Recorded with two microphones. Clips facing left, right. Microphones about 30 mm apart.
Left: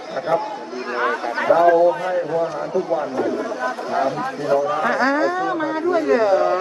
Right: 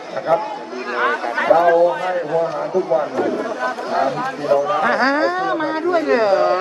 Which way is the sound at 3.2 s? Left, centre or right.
Right.